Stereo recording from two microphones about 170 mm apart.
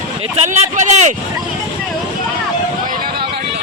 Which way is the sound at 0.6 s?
45° right (ahead or behind).